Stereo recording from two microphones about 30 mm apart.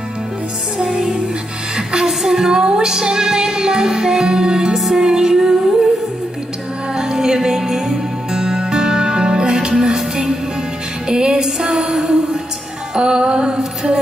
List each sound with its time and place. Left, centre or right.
1.8 s music: right
2.0 s music: centre
4.7 s music: centre
5.0 s music: centre
7.0 s music: centre
9.8 s music: centre
11.1 s music: right
11.4 s music: centre
12.9 s music: right